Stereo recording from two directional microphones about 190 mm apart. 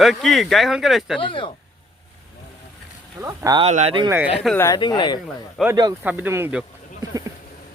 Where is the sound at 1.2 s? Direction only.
25° left (ahead or behind).